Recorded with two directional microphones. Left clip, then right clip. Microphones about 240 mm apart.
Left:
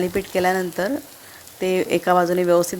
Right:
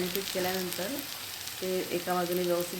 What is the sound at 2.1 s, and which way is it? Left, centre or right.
Speech, left.